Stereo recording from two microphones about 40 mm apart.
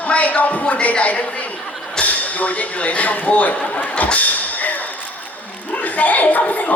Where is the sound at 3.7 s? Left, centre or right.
Left.